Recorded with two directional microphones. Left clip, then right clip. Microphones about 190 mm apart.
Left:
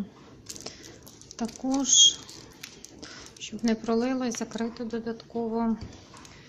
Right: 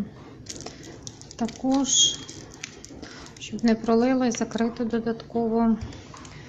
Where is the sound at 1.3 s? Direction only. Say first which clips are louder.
Right 5 dB; 10° left (ahead or behind).